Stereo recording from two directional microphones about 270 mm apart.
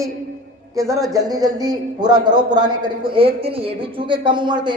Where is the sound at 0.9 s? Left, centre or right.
Centre.